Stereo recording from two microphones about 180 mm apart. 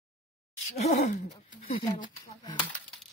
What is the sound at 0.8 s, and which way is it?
Speech, 45° left (ahead or behind).